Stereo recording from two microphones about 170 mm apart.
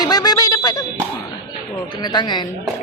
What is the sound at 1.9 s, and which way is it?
Speech, 25° left (ahead or behind).